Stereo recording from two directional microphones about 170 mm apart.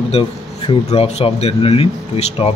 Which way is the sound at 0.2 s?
35° left (ahead or behind).